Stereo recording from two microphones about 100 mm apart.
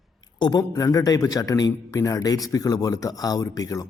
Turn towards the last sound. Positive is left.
turn(degrees=35)  # may be behind; listen again after turning